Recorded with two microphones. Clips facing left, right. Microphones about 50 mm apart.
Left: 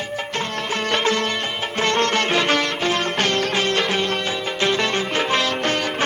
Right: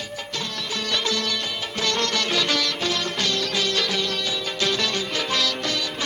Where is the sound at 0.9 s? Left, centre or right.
Left.